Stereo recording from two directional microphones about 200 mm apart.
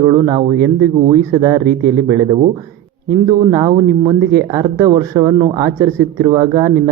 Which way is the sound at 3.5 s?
20° right (ahead or behind).